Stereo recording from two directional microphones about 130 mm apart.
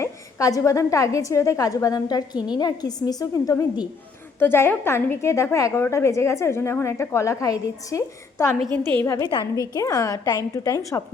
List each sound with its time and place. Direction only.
0.0 s a woman's voice: 25° left (ahead or behind)
9.6 s a woman's voice: 25° left (ahead or behind)